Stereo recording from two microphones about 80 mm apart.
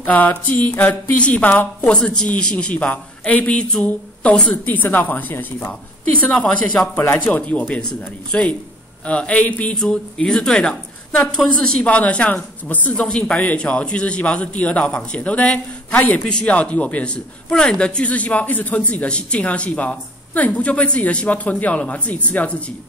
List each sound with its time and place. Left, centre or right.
0.0 s a woman's voice: left
6.8 s a woman's voice: left
7.4 s a man's voice: centre
9.8 s a man's voice: centre